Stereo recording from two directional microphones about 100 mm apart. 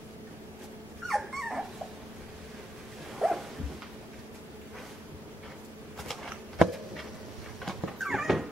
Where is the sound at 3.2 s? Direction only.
5° right (ahead or behind).